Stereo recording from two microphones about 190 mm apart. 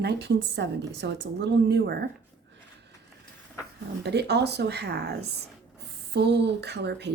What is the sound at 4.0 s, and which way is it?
Speech, 60° right (ahead or behind).